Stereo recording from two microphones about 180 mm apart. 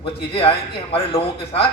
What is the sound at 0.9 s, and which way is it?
Speech, 30° left (ahead or behind).